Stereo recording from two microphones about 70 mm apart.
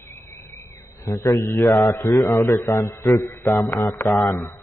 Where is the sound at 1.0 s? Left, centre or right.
Left.